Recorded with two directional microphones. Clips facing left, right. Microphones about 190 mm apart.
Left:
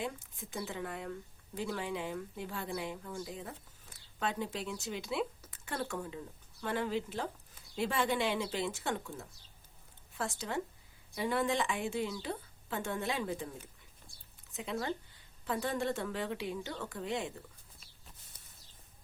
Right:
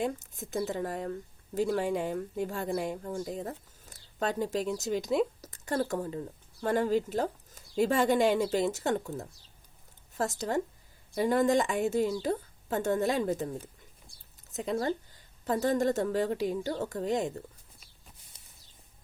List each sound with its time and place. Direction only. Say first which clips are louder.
0.0 s a woman's voice: right 7 dB; 45° right (ahead or behind)
14.5 s a woman's voice: right 7 dB; 40° right (ahead or behind)
18.3 s a sound: even; 25° right (ahead or behind)